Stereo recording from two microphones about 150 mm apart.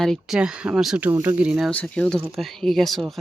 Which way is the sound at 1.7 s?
10° left (ahead or behind).